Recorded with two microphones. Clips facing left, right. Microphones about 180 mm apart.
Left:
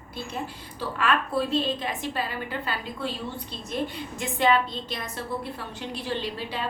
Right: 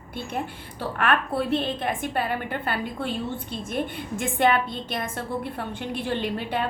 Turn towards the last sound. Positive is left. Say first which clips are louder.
# right 4 dB
turn(degrees=-55)  # may be behind; listen again after turning